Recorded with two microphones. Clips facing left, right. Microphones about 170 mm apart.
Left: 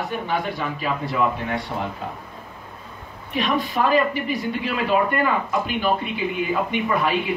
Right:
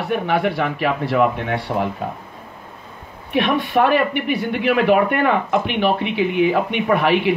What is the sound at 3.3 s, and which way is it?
Speech, 60° right (ahead or behind).